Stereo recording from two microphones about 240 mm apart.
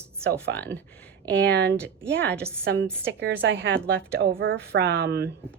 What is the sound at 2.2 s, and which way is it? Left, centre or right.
Speech, centre.